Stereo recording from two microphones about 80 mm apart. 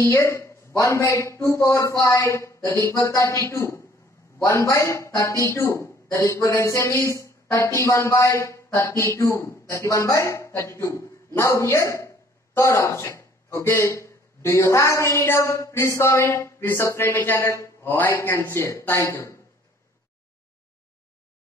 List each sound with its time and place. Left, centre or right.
0.0 s a man's voice: left